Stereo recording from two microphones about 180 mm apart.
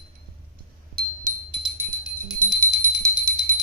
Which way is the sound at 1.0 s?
55° right (ahead or behind).